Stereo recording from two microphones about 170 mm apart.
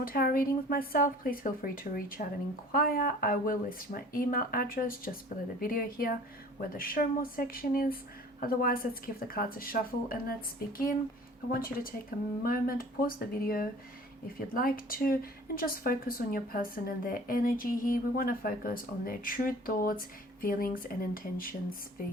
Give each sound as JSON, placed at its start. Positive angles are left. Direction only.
{"t": 0.0, "sound": "speech", "side_deg": 60}